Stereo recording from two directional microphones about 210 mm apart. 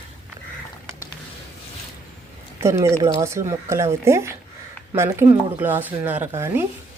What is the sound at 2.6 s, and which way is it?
Speech, 15° right (ahead or behind).